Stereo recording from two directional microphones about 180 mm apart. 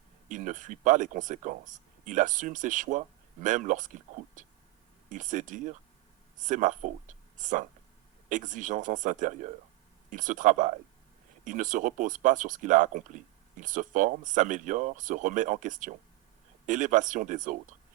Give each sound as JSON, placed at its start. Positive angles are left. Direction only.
{"t": 0.3, "sound": "speech", "side_deg": -45}